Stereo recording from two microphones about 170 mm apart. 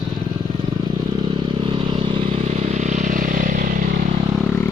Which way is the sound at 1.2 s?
30° right (ahead or behind).